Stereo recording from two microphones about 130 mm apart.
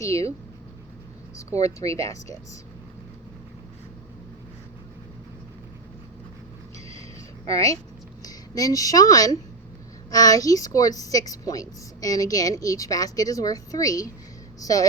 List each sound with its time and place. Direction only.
0.0 s a woman's voice: 25° left (ahead or behind)
1.4 s a woman's voice: 25° left (ahead or behind)
7.4 s a woman's voice: 25° left (ahead or behind)